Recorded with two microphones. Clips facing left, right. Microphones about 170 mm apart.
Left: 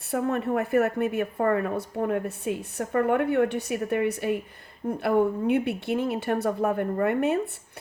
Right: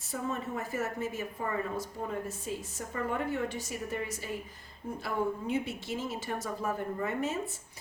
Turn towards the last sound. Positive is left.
turn(degrees=60)  # may be behind; listen again after turning